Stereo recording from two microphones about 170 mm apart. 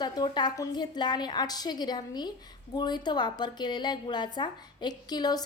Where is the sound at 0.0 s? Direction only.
25° left (ahead or behind).